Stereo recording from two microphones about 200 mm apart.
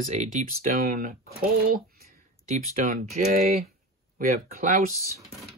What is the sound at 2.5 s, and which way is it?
Speech, 40° right (ahead or behind).